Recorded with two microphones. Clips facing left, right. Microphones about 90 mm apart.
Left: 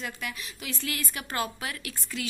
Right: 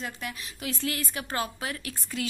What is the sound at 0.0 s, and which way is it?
A woman's voice, 30° right (ahead or behind).